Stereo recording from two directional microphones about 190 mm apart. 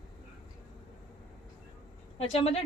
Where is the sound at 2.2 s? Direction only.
35° left (ahead or behind).